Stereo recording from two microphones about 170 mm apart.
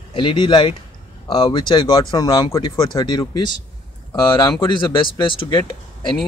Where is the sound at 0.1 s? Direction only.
30° left (ahead or behind).